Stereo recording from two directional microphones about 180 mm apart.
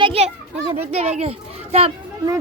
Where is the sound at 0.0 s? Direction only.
30° right (ahead or behind).